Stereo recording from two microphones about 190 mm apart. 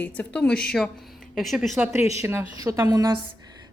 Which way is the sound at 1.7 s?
15° right (ahead or behind).